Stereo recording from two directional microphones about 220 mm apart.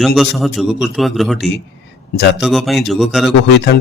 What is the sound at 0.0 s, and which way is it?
A man's voice, centre (ahead or behind).